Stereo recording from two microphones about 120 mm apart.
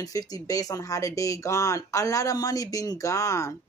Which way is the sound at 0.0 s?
30° left (ahead or behind).